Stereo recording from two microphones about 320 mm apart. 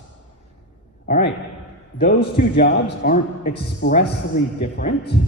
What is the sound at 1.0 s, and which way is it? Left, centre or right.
A man's voice, left.